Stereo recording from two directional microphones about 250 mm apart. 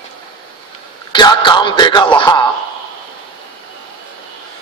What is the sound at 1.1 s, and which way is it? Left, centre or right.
Music, centre.